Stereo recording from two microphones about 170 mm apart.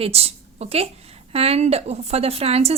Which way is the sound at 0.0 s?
35° right (ahead or behind).